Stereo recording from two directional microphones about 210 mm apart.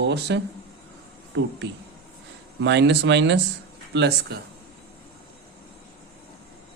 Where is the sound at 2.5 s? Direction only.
55° right (ahead or behind).